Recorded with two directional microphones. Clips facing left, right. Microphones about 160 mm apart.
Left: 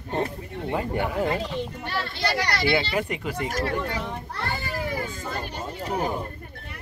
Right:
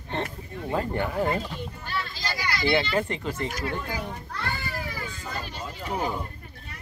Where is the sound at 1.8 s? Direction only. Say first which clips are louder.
Left 5 dB; 70° left (ahead or behind).